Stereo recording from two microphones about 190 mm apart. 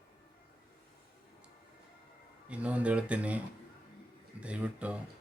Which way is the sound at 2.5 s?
5° right (ahead or behind).